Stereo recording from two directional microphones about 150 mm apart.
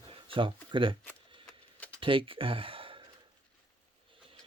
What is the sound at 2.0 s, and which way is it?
Speech, 35° right (ahead or behind).